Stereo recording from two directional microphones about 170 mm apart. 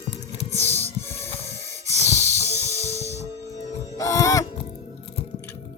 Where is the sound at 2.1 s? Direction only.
15° left (ahead or behind).